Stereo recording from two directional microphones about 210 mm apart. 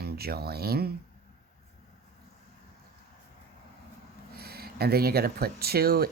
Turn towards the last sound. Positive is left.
turn(degrees=-45)  # may be behind; listen again after turning